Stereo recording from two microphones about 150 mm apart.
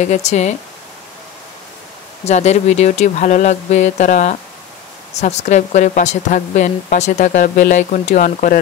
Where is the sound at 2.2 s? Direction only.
50° left (ahead or behind).